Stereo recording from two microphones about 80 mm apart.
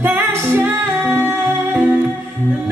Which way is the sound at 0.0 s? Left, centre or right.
Right.